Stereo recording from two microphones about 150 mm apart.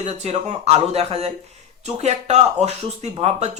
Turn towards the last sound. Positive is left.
turn(degrees=-45)  # may be behind; listen again after turning